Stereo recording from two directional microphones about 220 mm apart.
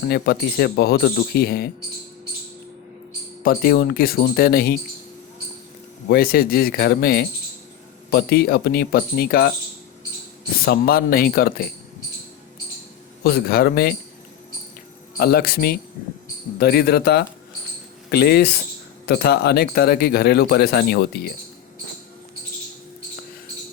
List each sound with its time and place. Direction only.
0.1 s speech: 45° left (ahead or behind)
3.4 s speech: 45° left (ahead or behind)
6.1 s speech: 45° left (ahead or behind)
10.7 s speech: 45° left (ahead or behind)
13.2 s speech: 45° left (ahead or behind)
15.2 s speech: 45° left (ahead or behind)